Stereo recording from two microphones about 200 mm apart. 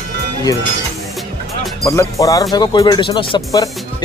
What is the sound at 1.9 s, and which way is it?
Speech, 15° left (ahead or behind).